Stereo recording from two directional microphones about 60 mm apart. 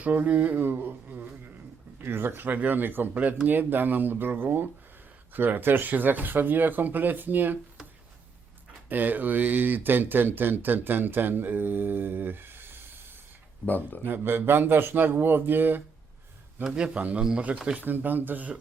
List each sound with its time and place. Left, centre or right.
0.0 s speech: right
8.9 s speech: right
13.7 s speech: left
14.0 s speech: right
16.6 s speech: centre
17.7 s speech: right